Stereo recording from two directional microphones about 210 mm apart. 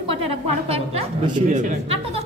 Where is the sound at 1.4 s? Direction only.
35° right (ahead or behind).